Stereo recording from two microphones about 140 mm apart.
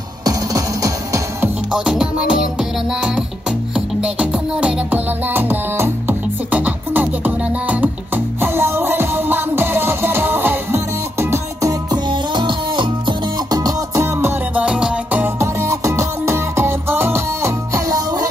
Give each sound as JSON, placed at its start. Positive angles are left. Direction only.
{"t": 0.2, "sound": "music", "side_deg": -25}
{"t": 1.7, "sound": "music", "side_deg": -5}